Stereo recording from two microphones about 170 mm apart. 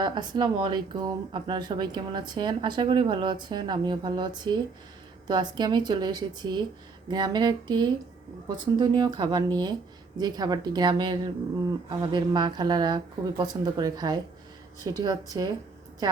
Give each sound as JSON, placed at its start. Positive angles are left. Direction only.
{"t": 0.0, "sound": "speech", "side_deg": -25}